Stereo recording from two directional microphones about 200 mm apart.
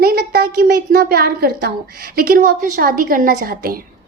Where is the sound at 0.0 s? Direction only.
45° right (ahead or behind).